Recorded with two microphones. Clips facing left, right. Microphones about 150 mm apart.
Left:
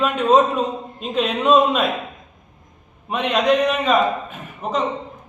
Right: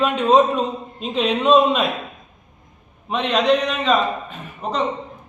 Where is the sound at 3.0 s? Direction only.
5° left (ahead or behind).